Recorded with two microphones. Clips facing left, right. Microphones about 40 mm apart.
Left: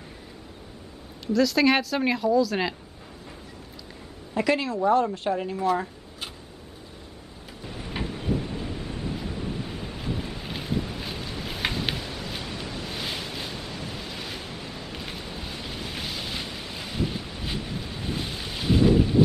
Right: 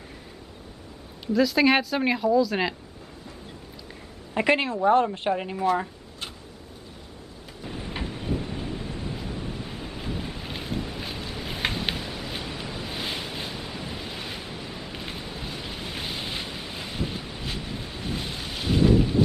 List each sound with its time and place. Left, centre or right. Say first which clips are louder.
1.2 s speech: even; centre
4.3 s a woman's voice: right 2 dB; right
5.7 s a sound: right 2 dB; centre
7.6 s a sound: right 1 dB; centre
8.0 s thunder: left 3 dB; centre
8.6 s waves: even; centre